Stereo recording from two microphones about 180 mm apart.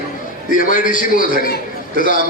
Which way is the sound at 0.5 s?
50° left (ahead or behind).